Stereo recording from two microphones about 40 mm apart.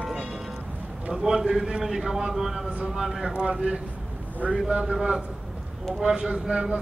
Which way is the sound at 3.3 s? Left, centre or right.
Right.